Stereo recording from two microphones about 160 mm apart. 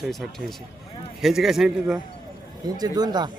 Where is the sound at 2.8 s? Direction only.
25° right (ahead or behind).